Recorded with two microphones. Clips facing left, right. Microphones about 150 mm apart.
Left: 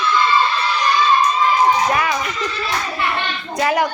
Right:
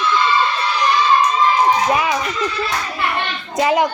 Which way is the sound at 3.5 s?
20° right (ahead or behind).